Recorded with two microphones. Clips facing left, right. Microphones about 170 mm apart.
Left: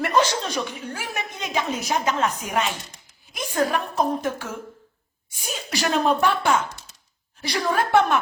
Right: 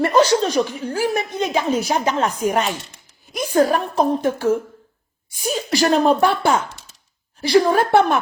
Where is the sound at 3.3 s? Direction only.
35° right (ahead or behind).